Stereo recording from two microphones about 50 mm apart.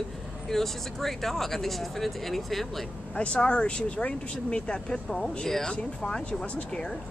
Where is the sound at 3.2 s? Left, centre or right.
Left.